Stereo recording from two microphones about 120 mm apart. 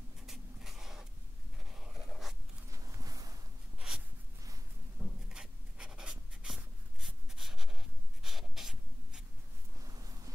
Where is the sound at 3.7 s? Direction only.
5° right (ahead or behind).